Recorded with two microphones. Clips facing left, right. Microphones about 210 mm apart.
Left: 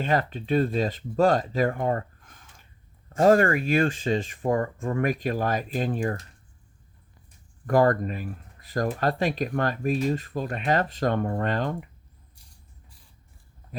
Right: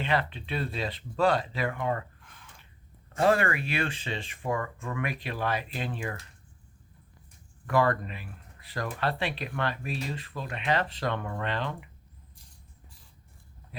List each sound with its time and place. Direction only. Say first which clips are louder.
0.0 s speech: left 4 dB; 45° left (ahead or behind)
7.7 s speech: left 5 dB; 45° left (ahead or behind)